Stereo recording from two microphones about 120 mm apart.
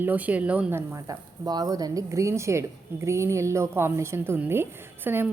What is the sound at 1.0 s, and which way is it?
A woman's voice, 30° right (ahead or behind).